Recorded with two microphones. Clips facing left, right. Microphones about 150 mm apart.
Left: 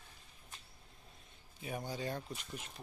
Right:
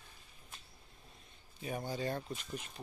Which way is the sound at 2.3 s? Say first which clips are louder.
Right 3 dB; 10° left (ahead or behind).